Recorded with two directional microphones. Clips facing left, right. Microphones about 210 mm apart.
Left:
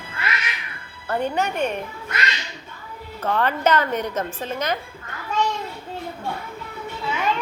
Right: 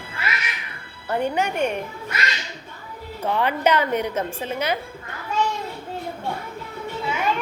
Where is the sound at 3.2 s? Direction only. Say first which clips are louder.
Even; 15° right (ahead or behind).